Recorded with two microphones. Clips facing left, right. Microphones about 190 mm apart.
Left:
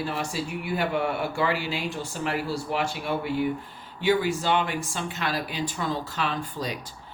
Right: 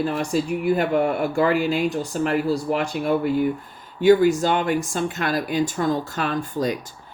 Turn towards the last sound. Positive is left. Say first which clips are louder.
# right 7 dB
turn(degrees=-45)  # may be behind; listen again after turning